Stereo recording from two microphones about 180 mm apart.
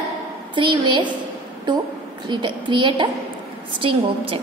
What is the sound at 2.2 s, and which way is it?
A woman's voice, 25° right (ahead or behind).